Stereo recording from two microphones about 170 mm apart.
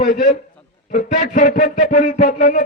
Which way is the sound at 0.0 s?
50° left (ahead or behind).